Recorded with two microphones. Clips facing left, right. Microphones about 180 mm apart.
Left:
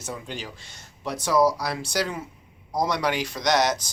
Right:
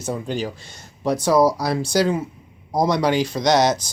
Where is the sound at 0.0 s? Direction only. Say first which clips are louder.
Right 9 dB; 40° right (ahead or behind).